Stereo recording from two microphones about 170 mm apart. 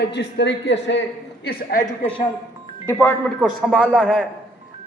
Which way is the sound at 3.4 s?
Centre (ahead or behind).